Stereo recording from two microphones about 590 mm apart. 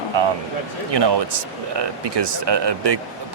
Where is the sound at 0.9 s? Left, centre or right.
Right.